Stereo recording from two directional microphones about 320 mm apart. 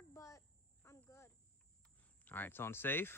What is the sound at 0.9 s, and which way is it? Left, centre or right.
Cricket, centre.